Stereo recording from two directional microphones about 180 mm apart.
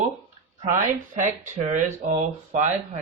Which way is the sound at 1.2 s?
40° right (ahead or behind).